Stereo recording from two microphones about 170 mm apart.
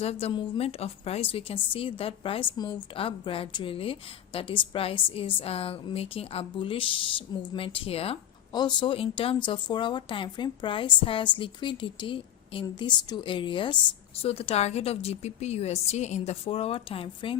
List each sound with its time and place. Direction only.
0.0 s a woman's voice: 35° left (ahead or behind)